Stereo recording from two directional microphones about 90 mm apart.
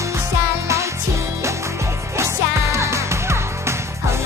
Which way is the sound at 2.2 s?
35° right (ahead or behind).